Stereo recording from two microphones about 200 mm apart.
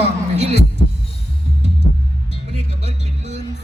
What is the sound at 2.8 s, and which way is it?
Music, 35° right (ahead or behind).